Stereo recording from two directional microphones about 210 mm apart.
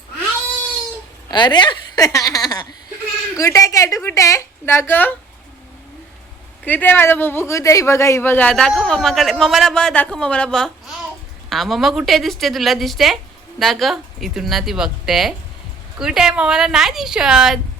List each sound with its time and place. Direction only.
1.3 s a woman's voice: 20° left (ahead or behind)
6.7 s speech: 10° left (ahead or behind)